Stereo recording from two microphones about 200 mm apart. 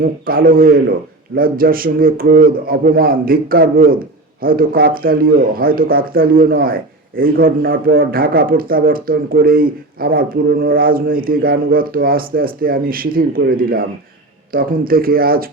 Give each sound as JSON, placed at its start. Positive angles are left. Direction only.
{"t": 0.0, "sound": "speech", "side_deg": -45}